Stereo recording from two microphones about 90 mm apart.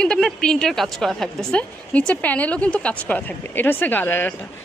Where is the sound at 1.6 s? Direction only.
15° left (ahead or behind).